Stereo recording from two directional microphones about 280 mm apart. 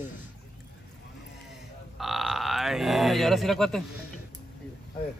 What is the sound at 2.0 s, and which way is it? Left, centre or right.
Speech, centre.